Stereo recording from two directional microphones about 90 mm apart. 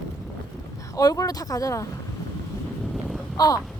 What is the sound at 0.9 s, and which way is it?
Speech, 40° left (ahead or behind).